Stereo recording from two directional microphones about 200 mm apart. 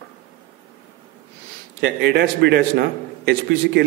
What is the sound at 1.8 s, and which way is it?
A man's voice, 60° right (ahead or behind).